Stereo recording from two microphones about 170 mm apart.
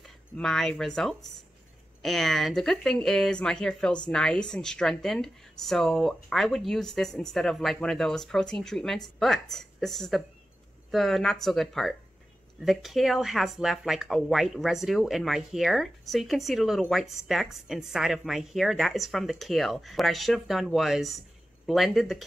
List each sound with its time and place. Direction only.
0.0 s speech: 5° left (ahead or behind)